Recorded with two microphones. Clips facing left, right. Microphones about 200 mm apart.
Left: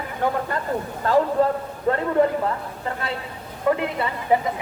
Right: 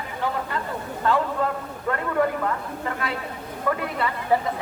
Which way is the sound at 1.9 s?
30° left (ahead or behind).